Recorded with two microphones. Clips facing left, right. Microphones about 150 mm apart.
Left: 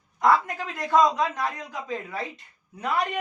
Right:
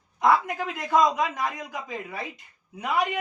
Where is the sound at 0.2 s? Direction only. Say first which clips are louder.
Even; 15° right (ahead or behind).